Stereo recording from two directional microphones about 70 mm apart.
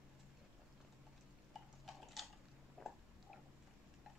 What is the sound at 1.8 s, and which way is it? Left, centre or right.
Tick-tock, centre.